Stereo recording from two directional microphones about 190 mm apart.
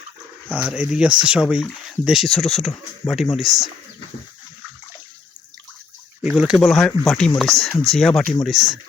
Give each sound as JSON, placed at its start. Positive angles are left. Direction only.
{"t": 0.4, "sound": "speech", "side_deg": -5}
{"t": 6.2, "sound": "speech", "side_deg": -5}